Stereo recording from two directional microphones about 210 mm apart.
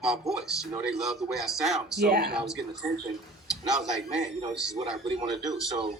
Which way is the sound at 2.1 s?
50° right (ahead or behind).